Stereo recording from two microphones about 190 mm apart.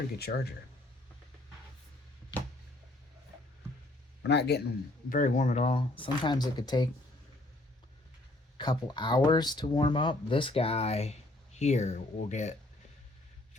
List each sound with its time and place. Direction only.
0.2 s speech: 55° left (ahead or behind)
4.2 s a man's voice: 65° left (ahead or behind)
5.0 s speech: 45° left (ahead or behind)
6.0 s speech: 25° left (ahead or behind)
8.5 s speech: 25° left (ahead or behind)